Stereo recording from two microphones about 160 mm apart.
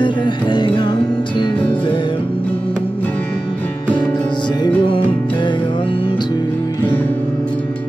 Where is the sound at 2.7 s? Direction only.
10° left (ahead or behind).